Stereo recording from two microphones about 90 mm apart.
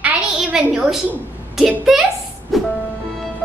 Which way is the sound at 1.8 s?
5° right (ahead or behind).